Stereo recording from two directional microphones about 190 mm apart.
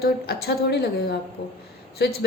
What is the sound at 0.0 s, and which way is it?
A woman's voice, 55° left (ahead or behind).